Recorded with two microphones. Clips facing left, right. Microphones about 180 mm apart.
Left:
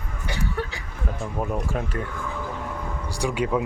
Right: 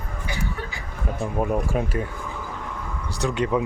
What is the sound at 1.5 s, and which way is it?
Speech, 10° right (ahead or behind).